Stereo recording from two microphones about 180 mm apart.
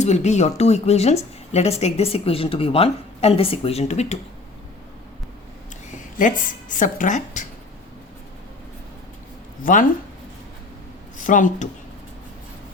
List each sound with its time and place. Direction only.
0.0 s a woman's voice: 40° left (ahead or behind)
6.1 s speech: 45° left (ahead or behind)
9.7 s speech: 50° left (ahead or behind)
11.2 s speech: 45° left (ahead or behind)